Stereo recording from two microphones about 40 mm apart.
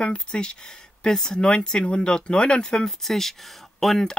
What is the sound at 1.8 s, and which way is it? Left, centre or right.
Speech, left.